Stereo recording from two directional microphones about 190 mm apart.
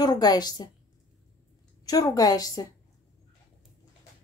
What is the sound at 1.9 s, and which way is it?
Speech, 20° left (ahead or behind).